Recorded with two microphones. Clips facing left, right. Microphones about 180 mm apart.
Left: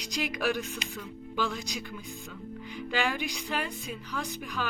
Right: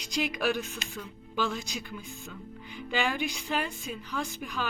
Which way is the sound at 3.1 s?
Centre (ahead or behind).